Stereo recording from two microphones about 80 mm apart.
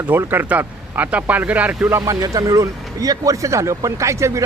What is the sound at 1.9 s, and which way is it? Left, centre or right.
Speech, right.